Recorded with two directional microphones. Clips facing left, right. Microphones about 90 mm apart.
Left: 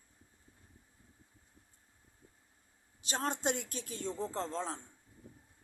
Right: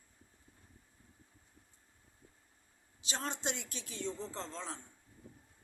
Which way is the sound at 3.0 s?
45° left (ahead or behind).